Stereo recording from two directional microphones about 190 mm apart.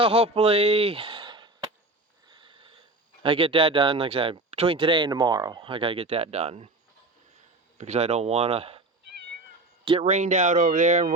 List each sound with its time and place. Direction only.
0.0 s speech: 30° right (ahead or behind)
2.2 s a sound: 25° right (ahead or behind)
3.2 s speech: 25° right (ahead or behind)
7.8 s speech: 35° right (ahead or behind)
9.8 s speech: 30° right (ahead or behind)